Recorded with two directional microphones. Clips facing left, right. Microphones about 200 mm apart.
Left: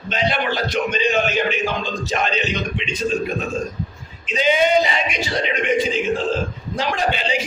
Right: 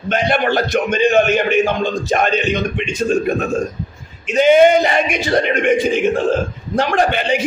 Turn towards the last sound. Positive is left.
turn(degrees=-55)  # may be behind; listen again after turning